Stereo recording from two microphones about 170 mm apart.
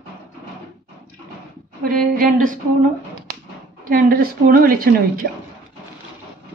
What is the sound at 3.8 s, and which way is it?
A woman's voice, 55° right (ahead or behind).